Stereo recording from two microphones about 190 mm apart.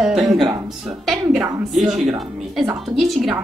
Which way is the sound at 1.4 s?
15° right (ahead or behind).